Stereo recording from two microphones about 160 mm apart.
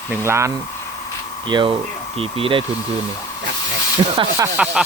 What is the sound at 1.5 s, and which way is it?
Speech, 30° right (ahead or behind).